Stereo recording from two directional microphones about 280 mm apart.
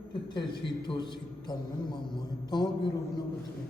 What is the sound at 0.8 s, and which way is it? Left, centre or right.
A man's voice, centre.